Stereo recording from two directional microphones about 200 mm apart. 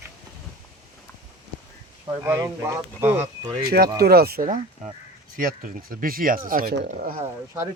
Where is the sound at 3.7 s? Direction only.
50° right (ahead or behind).